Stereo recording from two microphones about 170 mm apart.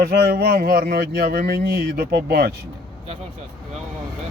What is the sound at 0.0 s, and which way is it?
Speech, 70° right (ahead or behind).